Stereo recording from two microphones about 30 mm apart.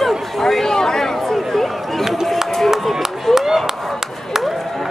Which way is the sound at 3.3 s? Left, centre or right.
Centre.